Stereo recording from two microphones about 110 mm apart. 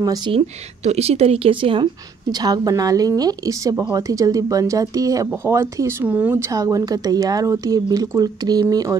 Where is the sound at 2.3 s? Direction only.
35° right (ahead or behind); by 6.5 s 15° right (ahead or behind).